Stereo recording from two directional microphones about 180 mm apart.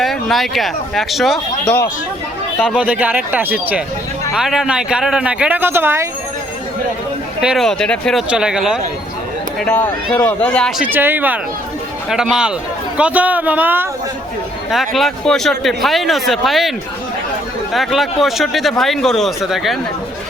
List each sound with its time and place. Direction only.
0.0 s speech: centre (ahead or behind)
7.4 s speech: centre (ahead or behind)
9.6 s speech: 5° left (ahead or behind)